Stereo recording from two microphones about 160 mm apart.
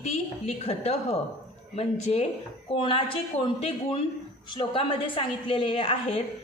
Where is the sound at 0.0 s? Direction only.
40° left (ahead or behind).